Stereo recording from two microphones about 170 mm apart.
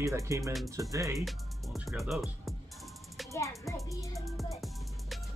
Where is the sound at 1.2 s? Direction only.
Centre (ahead or behind).